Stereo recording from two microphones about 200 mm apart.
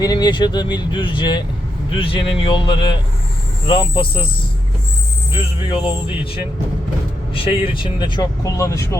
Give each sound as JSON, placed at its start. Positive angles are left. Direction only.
{"t": 0.0, "sound": "speech", "side_deg": 20}
{"t": 5.7, "sound": "speech", "side_deg": 25}
{"t": 7.3, "sound": "speech", "side_deg": 25}